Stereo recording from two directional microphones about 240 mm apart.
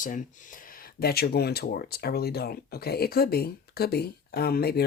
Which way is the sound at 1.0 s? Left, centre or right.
Left.